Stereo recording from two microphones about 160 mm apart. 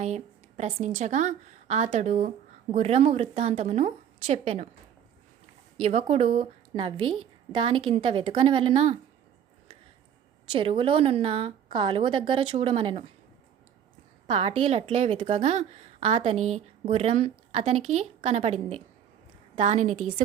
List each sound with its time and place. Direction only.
0.0 s a woman's voice: 45° right (ahead or behind)
5.8 s a woman's voice: 40° right (ahead or behind)
10.5 s a woman's voice: 35° right (ahead or behind)
14.3 s a woman's voice: 40° right (ahead or behind)